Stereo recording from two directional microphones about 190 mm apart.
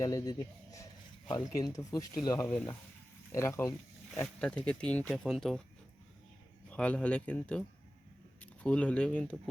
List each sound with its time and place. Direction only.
0.0 s speech: 20° left (ahead or behind)
4.1 s speech: 5° left (ahead or behind)
6.7 s speech: 5° left (ahead or behind)